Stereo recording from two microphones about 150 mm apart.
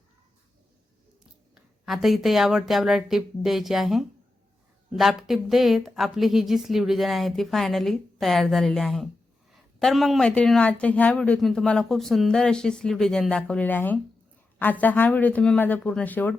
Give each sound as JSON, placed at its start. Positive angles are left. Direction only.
{"t": 1.8, "sound": "speech", "side_deg": 0}